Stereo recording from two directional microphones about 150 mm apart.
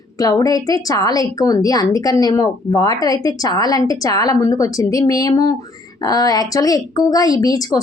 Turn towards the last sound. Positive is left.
turn(degrees=25)  # may be behind; listen again after turning